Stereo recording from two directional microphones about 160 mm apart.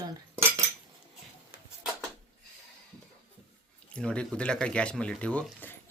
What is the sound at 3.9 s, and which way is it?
Speech, 5° left (ahead or behind).